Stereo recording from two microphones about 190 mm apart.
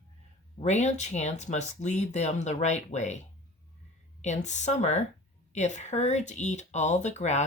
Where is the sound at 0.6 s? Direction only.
35° left (ahead or behind).